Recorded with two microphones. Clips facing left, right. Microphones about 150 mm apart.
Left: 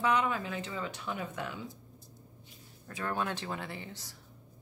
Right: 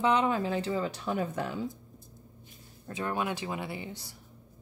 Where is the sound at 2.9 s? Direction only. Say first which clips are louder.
Right 3 dB; 15° right (ahead or behind).